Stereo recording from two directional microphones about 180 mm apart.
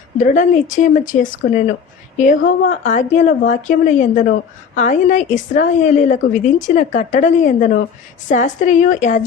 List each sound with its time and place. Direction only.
0.2 s a woman's voice: 45° left (ahead or behind)